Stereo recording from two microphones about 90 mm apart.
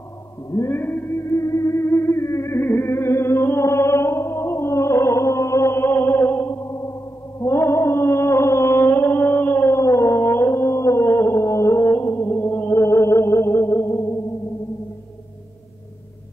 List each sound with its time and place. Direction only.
0.5 s music: 30° left (ahead or behind)